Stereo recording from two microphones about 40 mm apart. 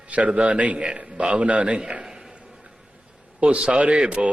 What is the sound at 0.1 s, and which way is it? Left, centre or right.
A man's voice, right.